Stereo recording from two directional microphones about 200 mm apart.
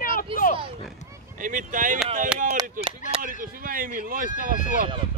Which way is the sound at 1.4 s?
40° right (ahead or behind).